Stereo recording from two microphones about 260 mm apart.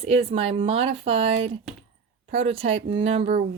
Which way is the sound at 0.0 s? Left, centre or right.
Right.